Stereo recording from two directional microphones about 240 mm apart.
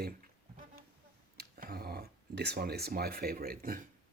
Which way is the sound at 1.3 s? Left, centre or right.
Right.